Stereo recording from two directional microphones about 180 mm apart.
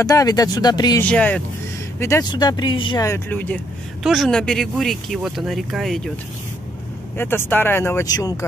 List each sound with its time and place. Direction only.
0.0 s speech: 20° left (ahead or behind)
1.0 s speech: 5° left (ahead or behind); by 3.1 s 25° left (ahead or behind)
3.1 s speech: 10° left (ahead or behind)
4.0 s speech: centre (ahead or behind)
7.2 s speech: 10° left (ahead or behind)